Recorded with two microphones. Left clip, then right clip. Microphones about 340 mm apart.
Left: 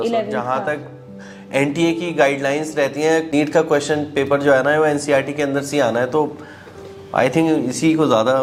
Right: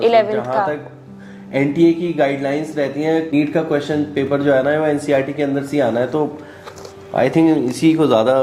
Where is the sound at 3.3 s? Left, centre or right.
Left.